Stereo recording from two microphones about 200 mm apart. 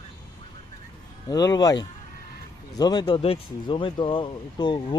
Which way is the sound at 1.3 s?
20° left (ahead or behind).